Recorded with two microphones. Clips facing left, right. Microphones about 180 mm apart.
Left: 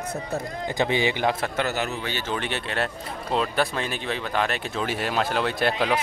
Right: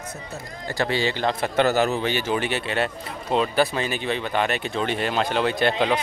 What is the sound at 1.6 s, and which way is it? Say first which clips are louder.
Speech: right 7 dB; 35° right (ahead or behind).